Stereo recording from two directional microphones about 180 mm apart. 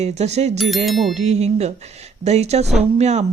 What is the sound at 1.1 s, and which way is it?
Speech, 40° right (ahead or behind).